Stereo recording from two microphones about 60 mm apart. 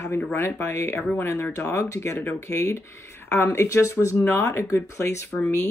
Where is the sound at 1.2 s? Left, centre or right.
Left.